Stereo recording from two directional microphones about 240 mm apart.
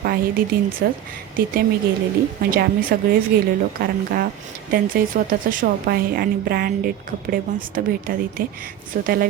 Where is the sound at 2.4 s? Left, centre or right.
Right.